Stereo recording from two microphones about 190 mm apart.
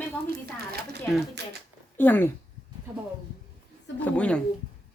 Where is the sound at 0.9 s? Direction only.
60° right (ahead or behind).